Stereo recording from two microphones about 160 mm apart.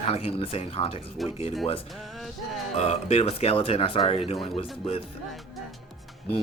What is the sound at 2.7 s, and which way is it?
Speech, 40° left (ahead or behind).